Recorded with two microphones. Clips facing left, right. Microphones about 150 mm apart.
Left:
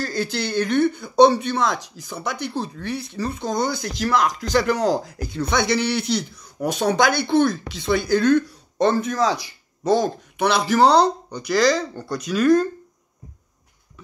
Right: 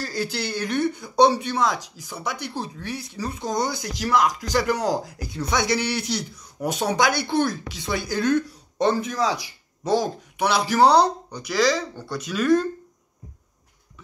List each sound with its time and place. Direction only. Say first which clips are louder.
0.0 s speech: left 3 dB; 10° right (ahead or behind)
5.0 s speech: left 4 dB; 55° left (ahead or behind)
5.7 s speech: left 3 dB; 10° right (ahead or behind)